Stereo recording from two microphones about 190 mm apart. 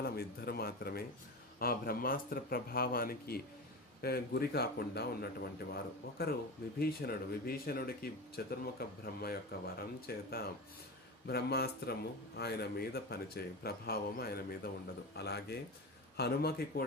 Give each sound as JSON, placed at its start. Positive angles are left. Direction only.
{"t": 0.0, "sound": "speech", "side_deg": 55}